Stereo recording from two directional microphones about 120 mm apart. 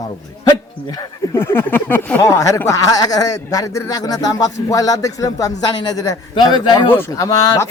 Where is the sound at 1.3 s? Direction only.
20° left (ahead or behind).